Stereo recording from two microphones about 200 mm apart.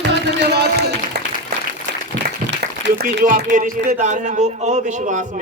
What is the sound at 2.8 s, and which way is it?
A man's voice, 55° right (ahead or behind).